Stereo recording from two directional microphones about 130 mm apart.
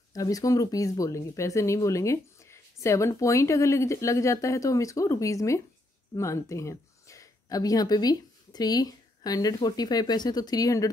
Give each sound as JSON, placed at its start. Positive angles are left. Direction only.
{"t": 0.1, "sound": "speech", "side_deg": 25}